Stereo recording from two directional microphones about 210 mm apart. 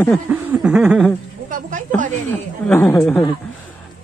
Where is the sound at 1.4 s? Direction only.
40° right (ahead or behind).